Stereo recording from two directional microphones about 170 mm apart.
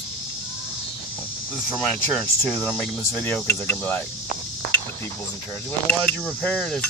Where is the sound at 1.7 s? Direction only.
5° left (ahead or behind).